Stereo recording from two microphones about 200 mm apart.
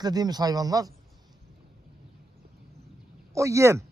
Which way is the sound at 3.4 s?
15° right (ahead or behind).